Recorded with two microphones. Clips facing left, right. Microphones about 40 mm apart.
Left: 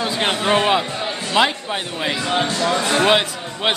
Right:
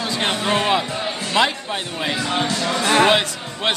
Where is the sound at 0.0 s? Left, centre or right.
Centre.